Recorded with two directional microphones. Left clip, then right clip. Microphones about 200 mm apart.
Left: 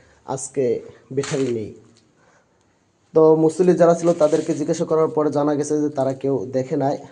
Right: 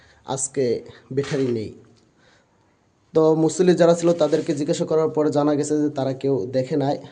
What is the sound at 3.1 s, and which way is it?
A man's voice, 5° right (ahead or behind).